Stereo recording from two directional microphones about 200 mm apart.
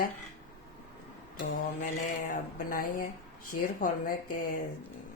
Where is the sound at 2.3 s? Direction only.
45° left (ahead or behind).